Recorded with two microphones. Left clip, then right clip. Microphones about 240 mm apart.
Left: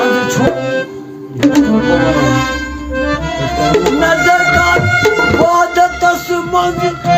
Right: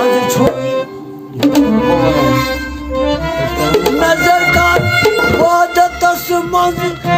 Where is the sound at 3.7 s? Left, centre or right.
Right.